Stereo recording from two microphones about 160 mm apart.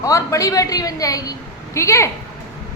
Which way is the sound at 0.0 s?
20° left (ahead or behind).